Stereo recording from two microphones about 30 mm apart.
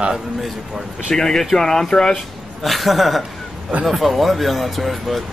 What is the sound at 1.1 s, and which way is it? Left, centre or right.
Speech, centre.